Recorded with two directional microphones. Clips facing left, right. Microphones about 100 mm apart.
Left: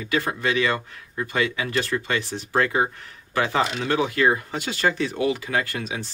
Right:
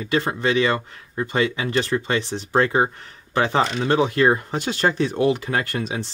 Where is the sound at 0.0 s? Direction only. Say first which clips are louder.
Right 3 dB; 25° right (ahead or behind).